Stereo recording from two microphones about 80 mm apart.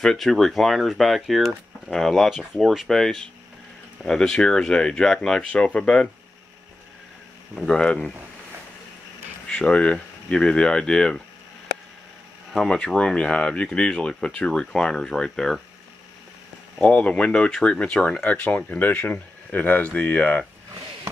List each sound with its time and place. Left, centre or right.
0.0 s speech: centre
7.5 s speech: centre
9.5 s speech: centre
12.5 s speech: centre
16.8 s speech: centre